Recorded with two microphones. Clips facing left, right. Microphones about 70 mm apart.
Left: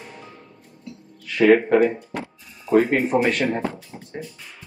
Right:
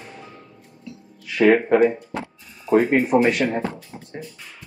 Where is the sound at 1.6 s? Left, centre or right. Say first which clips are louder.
Right 1 dB; centre.